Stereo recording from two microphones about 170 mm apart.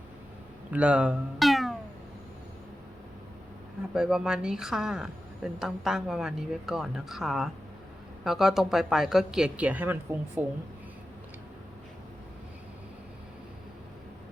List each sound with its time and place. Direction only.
0.7 s speech: 5° right (ahead or behind)
3.9 s a woman's voice: 5° right (ahead or behind)